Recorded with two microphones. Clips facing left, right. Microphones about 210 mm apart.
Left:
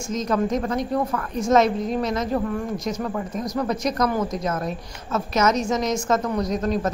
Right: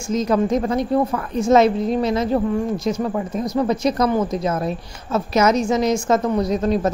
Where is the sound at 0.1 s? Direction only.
30° right (ahead or behind).